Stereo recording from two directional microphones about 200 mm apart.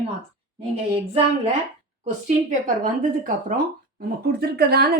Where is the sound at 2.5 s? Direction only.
40° right (ahead or behind).